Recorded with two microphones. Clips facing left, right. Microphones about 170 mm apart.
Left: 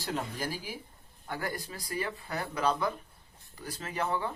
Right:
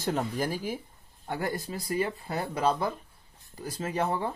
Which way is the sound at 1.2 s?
20° right (ahead or behind).